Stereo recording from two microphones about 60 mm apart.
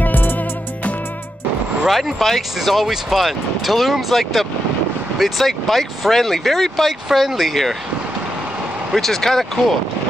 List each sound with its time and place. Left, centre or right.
0.0 s music: left
1.9 s speech: centre
8.9 s speech: centre